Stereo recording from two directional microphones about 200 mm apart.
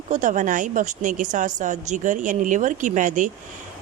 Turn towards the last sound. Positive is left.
turn(degrees=-40)  # may be behind; listen again after turning